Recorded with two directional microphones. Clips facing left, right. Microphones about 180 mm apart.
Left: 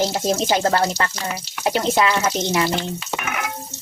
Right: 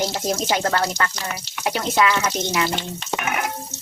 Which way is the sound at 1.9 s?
30° left (ahead or behind).